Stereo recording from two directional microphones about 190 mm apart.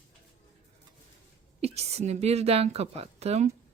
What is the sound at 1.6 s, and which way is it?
Speech, 35° right (ahead or behind).